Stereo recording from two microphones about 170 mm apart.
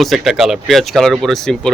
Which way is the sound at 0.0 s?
Centre (ahead or behind).